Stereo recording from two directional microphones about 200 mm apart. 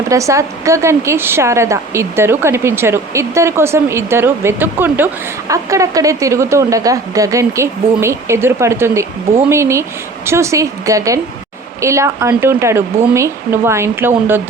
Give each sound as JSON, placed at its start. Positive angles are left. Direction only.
{"t": 0.1, "sound": "speech", "side_deg": -15}